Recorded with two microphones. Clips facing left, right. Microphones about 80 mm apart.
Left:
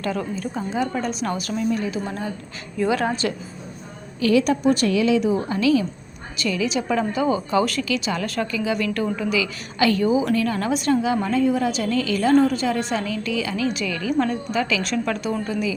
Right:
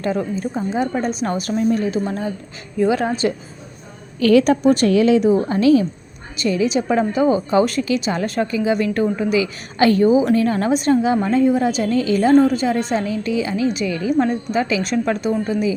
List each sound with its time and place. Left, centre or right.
0.0 s a woman's voice: right
2.7 s a woman's voice: right
4.2 s a woman's voice: right